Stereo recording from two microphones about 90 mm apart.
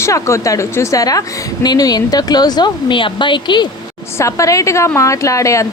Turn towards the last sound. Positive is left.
turn(degrees=35)  # may be behind; listen again after turning